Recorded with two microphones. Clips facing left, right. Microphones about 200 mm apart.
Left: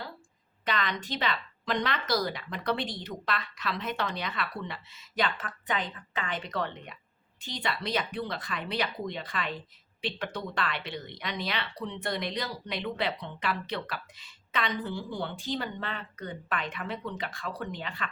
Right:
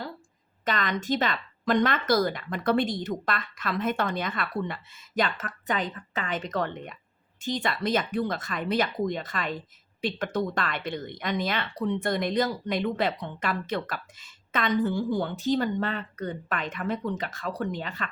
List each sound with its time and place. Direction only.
0.6 s speech: 45° right (ahead or behind)